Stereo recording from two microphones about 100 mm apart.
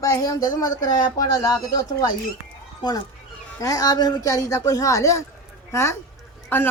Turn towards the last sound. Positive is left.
turn(degrees=20)  # may be behind; listen again after turning